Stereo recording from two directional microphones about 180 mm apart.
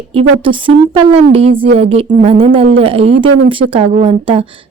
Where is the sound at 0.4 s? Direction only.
30° right (ahead or behind).